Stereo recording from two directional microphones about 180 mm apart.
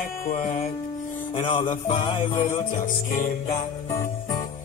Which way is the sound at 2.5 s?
45° left (ahead or behind).